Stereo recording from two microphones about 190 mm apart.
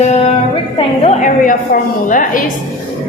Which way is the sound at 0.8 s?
30° left (ahead or behind).